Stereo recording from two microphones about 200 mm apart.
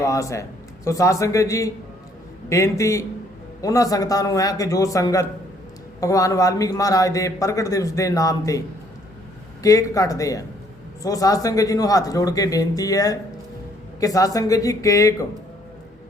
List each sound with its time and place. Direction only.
0.0 s a man's voice: 15° left (ahead or behind)
9.6 s a man's voice: 15° left (ahead or behind)